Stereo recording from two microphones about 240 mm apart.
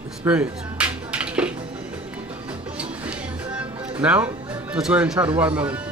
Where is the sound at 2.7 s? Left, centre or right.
Centre.